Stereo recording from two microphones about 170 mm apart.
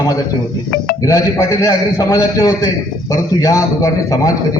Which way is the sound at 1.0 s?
20° left (ahead or behind).